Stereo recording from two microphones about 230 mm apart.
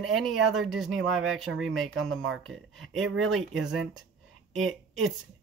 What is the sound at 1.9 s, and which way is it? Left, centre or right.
Speech, right.